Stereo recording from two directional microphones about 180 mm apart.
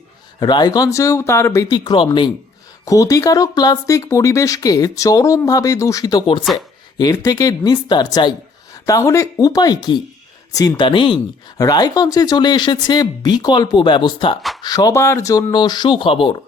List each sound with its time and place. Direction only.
0.3 s speech: 25° left (ahead or behind)